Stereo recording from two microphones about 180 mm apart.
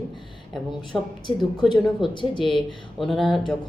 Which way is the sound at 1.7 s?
25° left (ahead or behind).